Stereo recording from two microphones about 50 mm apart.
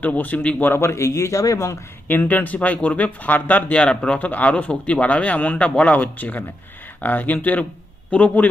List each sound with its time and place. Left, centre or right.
0.0 s speech: left
0.7 s speech: left
2.0 s speech: left
3.8 s a man's voice: left
4.2 s a man's voice: left
6.0 s speech: left
8.1 s a man's voice: left